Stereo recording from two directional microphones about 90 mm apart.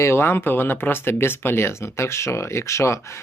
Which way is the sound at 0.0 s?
25° left (ahead or behind).